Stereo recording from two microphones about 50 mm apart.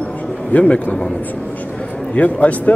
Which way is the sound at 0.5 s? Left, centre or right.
Left.